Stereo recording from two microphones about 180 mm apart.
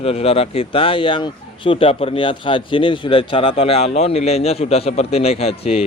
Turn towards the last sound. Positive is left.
turn(degrees=35)  # may be behind; listen again after turning